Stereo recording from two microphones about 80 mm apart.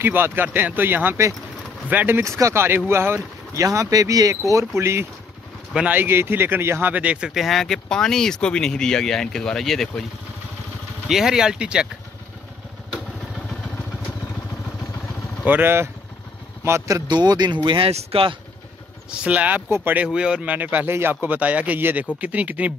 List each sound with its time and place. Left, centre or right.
0.0 s speech: right
3.6 s speech: right
6.9 s speech: centre
11.1 s speech: centre
15.4 s speech: right
16.6 s speech: right
17.1 s speech: right
19.0 s speech: centre
20.1 s speech: centre